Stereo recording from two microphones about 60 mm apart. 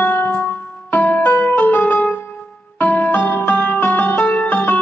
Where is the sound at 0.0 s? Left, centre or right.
Left.